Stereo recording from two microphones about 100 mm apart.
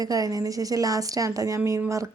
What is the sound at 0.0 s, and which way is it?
A woman's voice, 35° right (ahead or behind).